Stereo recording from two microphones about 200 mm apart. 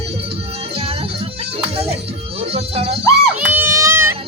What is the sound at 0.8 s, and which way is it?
Music, 30° right (ahead or behind).